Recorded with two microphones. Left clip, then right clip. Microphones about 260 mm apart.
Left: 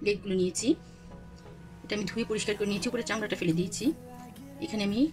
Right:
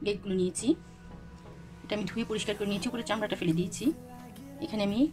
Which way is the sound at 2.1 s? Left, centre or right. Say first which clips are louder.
Left 2 dB; centre.